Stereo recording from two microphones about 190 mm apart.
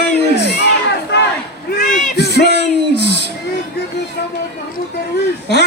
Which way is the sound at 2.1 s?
60° left (ahead or behind).